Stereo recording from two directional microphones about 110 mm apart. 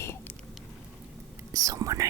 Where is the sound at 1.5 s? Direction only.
30° right (ahead or behind).